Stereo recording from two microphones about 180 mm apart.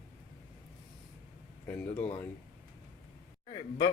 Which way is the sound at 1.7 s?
10° left (ahead or behind).